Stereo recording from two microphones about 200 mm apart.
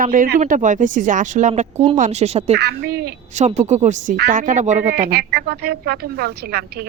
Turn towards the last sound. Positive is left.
turn(degrees=-50)  # may be behind; listen again after turning